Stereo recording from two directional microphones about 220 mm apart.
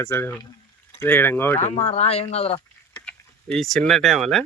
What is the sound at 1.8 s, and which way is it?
Speech, 30° left (ahead or behind).